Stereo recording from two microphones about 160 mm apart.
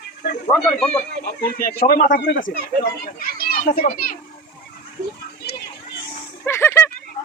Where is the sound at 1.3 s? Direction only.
65° left (ahead or behind).